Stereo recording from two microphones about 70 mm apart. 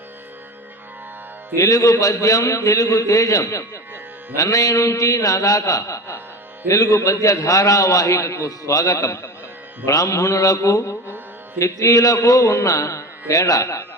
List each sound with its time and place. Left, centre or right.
1.5 s a man's voice: left